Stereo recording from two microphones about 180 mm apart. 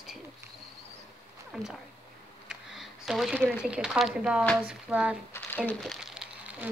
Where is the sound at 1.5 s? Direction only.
Centre (ahead or behind).